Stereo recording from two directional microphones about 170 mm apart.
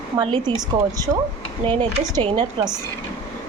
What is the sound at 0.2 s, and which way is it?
Speech, 25° right (ahead or behind).